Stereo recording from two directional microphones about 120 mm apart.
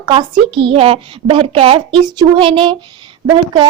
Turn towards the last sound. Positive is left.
turn(degrees=-40)  # may be behind; listen again after turning